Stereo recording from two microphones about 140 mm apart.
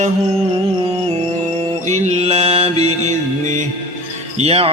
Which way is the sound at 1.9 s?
55° right (ahead or behind).